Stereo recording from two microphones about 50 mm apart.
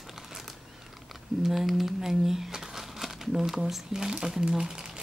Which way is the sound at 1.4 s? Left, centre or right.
Centre.